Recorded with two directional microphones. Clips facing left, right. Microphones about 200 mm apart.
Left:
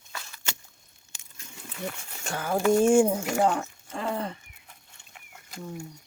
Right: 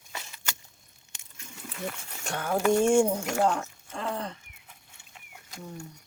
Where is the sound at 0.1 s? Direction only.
20° right (ahead or behind).